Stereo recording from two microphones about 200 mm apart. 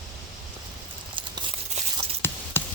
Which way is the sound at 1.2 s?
25° right (ahead or behind).